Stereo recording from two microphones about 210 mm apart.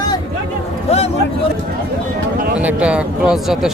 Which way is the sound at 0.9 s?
30° left (ahead or behind).